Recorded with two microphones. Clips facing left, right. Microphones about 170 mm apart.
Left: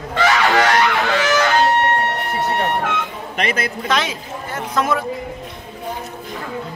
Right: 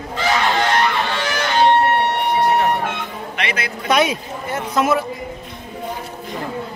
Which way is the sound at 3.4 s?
45° left (ahead or behind).